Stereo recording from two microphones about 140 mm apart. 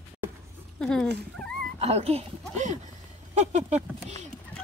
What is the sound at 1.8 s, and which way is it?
A child's voice, 50° right (ahead or behind).